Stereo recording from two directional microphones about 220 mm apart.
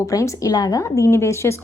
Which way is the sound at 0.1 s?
15° left (ahead or behind).